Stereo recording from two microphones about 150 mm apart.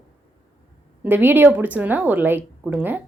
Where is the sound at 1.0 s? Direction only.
10° right (ahead or behind).